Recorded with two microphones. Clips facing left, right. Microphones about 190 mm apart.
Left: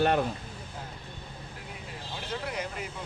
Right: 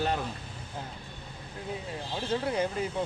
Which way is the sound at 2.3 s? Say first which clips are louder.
Right 6 dB; 30° right (ahead or behind).